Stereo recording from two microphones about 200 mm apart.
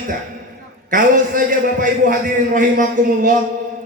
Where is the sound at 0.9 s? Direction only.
40° right (ahead or behind).